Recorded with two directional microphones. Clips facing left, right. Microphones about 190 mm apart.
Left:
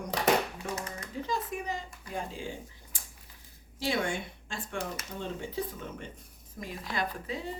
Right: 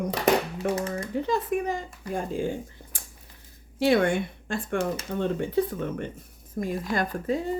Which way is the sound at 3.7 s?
60° right (ahead or behind).